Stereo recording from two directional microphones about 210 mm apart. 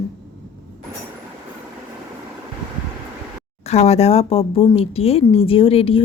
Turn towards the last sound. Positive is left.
turn(degrees=25)  # may be behind; listen again after turning